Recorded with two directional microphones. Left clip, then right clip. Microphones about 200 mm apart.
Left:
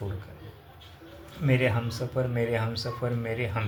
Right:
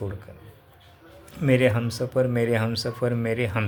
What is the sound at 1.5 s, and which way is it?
Speech, 60° right (ahead or behind).